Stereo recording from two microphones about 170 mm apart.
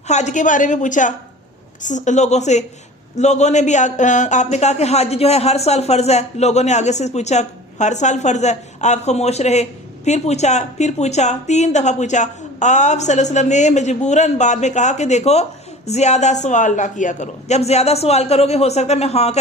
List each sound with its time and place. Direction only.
0.1 s speech: 45° left (ahead or behind)